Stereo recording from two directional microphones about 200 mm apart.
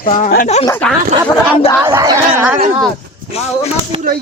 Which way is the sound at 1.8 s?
15° right (ahead or behind).